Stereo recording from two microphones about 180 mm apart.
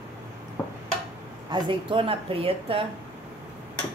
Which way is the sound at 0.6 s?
10° left (ahead or behind).